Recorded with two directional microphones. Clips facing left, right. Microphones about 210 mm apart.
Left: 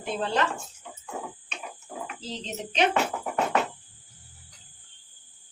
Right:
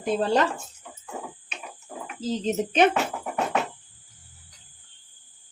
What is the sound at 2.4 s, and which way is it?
Speech, 50° right (ahead or behind).